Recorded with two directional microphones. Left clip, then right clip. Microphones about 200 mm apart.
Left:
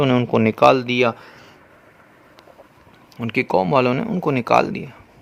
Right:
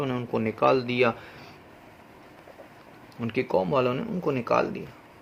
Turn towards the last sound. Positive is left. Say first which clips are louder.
# left 8 dB
turn(degrees=50)  # may be behind; listen again after turning